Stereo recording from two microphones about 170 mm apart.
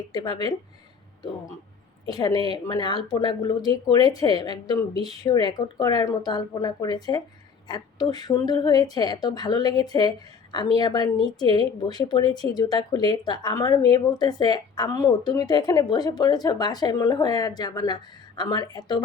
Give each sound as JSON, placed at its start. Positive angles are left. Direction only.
{"t": 0.1, "sound": "speech", "side_deg": 25}
{"t": 2.0, "sound": "speech", "side_deg": 20}